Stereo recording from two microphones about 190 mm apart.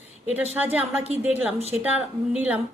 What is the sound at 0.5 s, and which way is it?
A woman's voice, 10° right (ahead or behind).